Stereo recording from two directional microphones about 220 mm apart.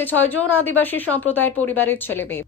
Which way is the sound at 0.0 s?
10° left (ahead or behind).